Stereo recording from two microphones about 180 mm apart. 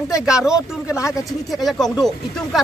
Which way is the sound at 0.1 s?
5° right (ahead or behind).